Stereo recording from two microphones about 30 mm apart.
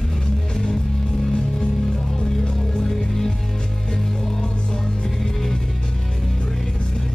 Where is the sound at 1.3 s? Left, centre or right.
Left.